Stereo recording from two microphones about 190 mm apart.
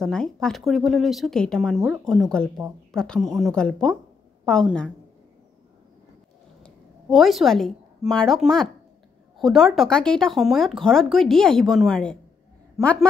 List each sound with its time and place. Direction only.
0.0 s speech: 5° left (ahead or behind)
6.6 s a woman's voice: centre (ahead or behind)